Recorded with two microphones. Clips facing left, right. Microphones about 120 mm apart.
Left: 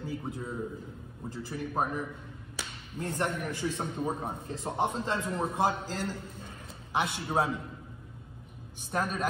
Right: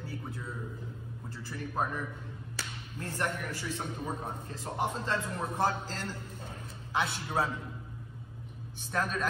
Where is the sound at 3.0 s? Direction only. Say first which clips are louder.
Left 3 dB; 20° left (ahead or behind).